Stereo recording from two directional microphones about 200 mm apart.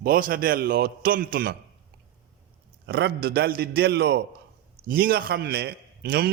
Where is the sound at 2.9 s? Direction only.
55° right (ahead or behind).